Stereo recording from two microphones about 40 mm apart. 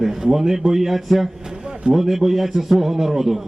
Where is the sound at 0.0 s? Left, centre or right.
Centre.